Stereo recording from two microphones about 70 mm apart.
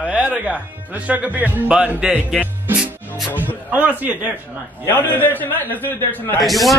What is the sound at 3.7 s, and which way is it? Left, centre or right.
Speech, right.